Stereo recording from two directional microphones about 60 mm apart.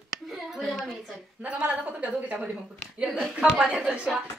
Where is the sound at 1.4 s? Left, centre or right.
Right.